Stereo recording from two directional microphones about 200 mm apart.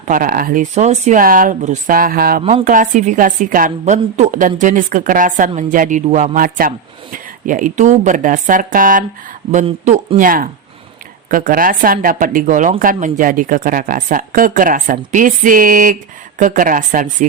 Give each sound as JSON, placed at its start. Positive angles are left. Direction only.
{"t": 0.1, "sound": "speech", "side_deg": -45}
{"t": 2.4, "sound": "speech", "side_deg": -25}
{"t": 2.6, "sound": "a woman's voice", "side_deg": -40}